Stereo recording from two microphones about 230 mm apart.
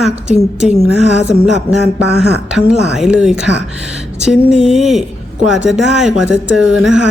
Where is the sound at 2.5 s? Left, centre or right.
Centre.